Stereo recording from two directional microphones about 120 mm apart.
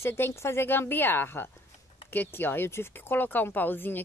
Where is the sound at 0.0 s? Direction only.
20° left (ahead or behind).